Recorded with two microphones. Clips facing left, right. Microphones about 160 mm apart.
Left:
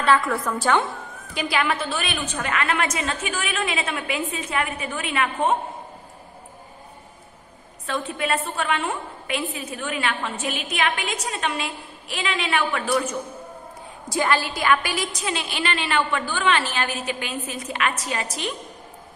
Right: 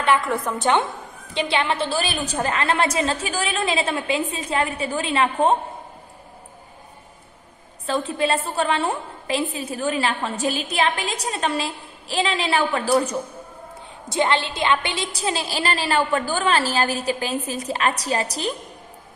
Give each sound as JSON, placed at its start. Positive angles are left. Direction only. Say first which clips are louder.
{"t": 0.0, "sound": "a woman's voice", "louder": "even", "side_deg": -20}
{"t": 7.8, "sound": "a woman's voice", "louder": "right 4 dB", "side_deg": -30}
{"t": 14.0, "sound": "a woman's voice", "louder": "right 1 dB", "side_deg": -25}